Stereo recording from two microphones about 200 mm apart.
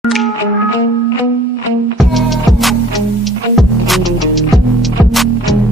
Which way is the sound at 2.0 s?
Centre (ahead or behind).